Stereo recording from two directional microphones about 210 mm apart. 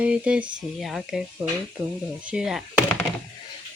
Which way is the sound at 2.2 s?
5° right (ahead or behind).